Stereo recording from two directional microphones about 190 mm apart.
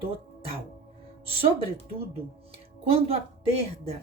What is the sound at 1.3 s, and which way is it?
Speech, 30° right (ahead or behind).